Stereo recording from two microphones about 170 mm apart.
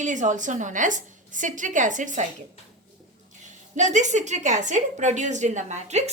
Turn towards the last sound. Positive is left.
turn(degrees=-40)  # may be behind; listen again after turning